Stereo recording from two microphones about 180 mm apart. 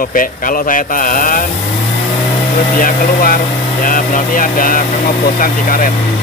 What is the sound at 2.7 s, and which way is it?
Speech, 50° left (ahead or behind).